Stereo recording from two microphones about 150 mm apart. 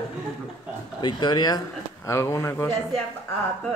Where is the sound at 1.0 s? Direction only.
25° left (ahead or behind).